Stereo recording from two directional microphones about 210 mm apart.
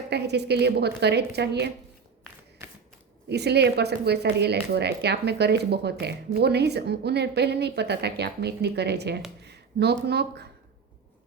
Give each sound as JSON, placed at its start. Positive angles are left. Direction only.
{"t": 0.1, "sound": "speech", "side_deg": -50}
{"t": 3.2, "sound": "speech", "side_deg": -50}